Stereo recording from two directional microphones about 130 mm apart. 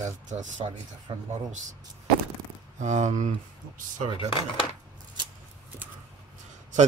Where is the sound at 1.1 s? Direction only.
40° right (ahead or behind).